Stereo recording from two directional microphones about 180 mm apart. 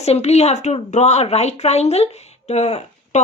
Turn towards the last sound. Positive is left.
turn(degrees=40)  # may be behind; listen again after turning